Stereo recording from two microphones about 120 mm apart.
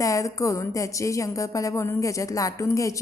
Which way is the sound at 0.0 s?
25° left (ahead or behind).